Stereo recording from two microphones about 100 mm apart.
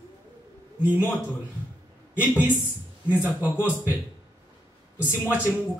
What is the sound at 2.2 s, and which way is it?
Speech, 20° left (ahead or behind).